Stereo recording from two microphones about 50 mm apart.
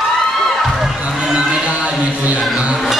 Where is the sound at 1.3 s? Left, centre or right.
Centre.